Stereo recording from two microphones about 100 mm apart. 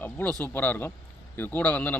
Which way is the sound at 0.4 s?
20° left (ahead or behind).